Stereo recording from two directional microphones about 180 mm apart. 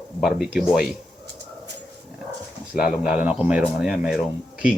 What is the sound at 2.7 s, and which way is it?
Speech, 5° right (ahead or behind).